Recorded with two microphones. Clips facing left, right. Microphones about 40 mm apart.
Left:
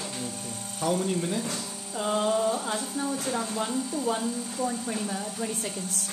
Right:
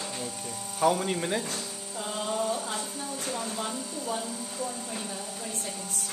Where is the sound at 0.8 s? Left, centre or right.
Right.